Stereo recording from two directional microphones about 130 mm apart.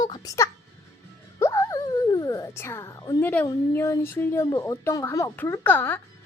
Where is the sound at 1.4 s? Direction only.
25° left (ahead or behind).